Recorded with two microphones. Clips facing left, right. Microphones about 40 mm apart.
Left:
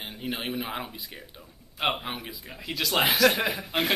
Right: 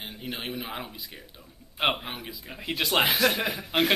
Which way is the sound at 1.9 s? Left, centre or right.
Centre.